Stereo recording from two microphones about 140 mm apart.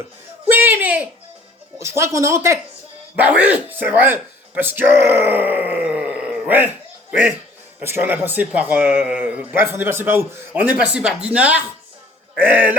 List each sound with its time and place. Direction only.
0.5 s a man's voice: 15° right (ahead or behind)
3.2 s a man's voice: 10° right (ahead or behind)